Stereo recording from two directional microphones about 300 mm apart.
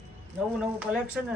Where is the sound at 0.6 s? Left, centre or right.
Centre.